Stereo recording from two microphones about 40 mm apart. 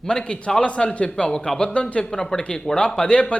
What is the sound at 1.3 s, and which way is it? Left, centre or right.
A man's voice, centre.